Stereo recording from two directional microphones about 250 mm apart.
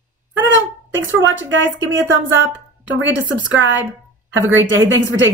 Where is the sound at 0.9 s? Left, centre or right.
Right.